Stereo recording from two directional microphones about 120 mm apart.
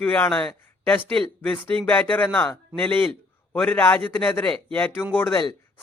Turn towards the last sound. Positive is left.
turn(degrees=15)  # may be behind; listen again after turning